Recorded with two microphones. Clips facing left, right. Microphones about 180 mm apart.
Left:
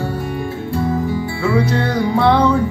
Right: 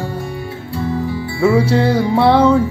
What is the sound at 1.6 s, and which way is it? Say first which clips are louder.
Music: right 3 dB; 30° right (ahead or behind).